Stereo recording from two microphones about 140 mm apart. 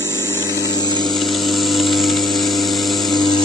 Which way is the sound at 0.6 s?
30° left (ahead or behind).